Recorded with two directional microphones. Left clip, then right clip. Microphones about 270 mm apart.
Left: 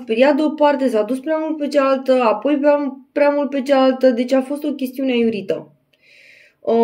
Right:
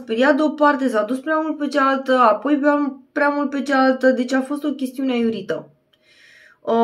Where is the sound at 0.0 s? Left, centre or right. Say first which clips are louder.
Left 2 dB; centre.